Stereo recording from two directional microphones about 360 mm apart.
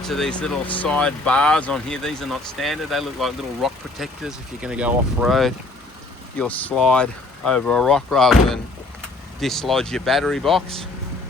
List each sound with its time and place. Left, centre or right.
0.0 s speech: centre